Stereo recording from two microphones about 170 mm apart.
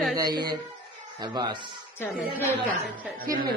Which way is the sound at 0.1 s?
25° right (ahead or behind).